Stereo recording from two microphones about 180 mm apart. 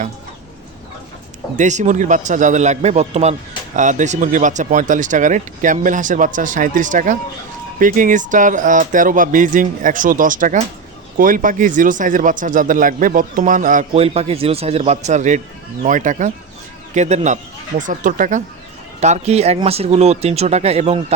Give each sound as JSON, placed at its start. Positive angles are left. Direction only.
{"t": 1.5, "sound": "speech", "side_deg": -40}